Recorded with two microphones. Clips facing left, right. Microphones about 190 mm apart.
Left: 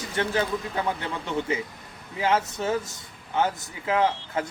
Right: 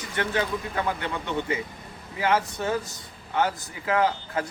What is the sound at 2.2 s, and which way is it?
A man's voice, 25° left (ahead or behind).